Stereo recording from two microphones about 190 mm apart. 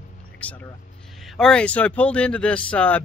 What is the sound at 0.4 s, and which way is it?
Speech, 10° left (ahead or behind).